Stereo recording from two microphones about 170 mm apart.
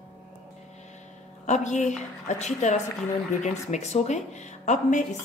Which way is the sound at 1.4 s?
45° left (ahead or behind).